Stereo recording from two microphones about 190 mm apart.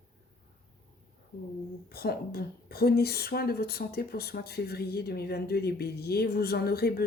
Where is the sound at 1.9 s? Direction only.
55° left (ahead or behind).